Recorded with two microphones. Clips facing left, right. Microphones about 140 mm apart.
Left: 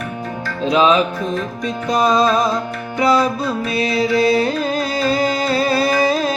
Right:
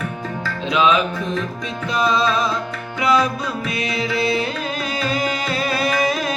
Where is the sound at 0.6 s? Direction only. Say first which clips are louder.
Left 4 dB; 40° left (ahead or behind).